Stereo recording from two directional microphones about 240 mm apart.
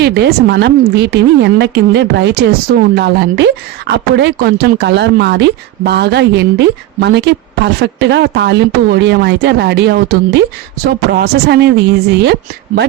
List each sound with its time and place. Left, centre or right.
0.0 s a woman's voice: right